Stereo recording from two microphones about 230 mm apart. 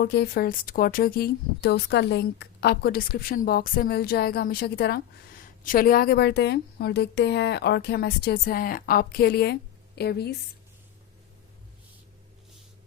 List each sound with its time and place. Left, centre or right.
0.0 s speech: left